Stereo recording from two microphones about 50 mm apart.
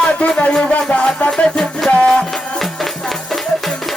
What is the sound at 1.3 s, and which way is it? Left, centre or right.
Music, centre.